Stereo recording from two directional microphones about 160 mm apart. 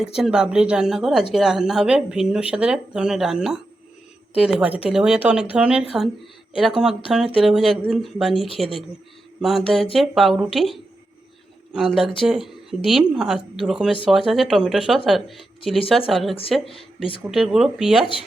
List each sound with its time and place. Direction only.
0.2 s speech: 5° right (ahead or behind)